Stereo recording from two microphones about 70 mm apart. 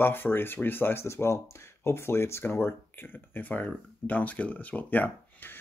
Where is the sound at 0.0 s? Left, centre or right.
Left.